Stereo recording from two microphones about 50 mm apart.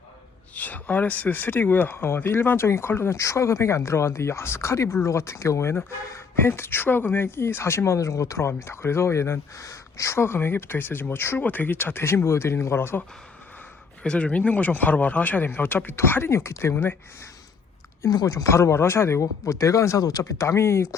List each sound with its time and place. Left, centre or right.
0.5 s speech: left
3.2 s speech: left
10.2 s speech: left
11.3 s speech: left
14.0 s speech: left
16.3 s speech: left
18.0 s speech: left
20.5 s speech: left